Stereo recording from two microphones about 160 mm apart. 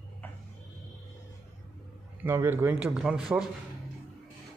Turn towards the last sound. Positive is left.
turn(degrees=-5)  # may be behind; listen again after turning